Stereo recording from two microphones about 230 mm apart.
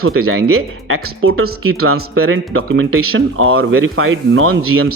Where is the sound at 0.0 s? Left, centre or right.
Right.